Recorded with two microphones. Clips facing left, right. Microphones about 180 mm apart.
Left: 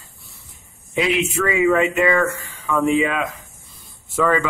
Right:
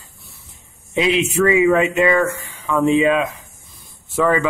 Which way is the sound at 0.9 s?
20° right (ahead or behind).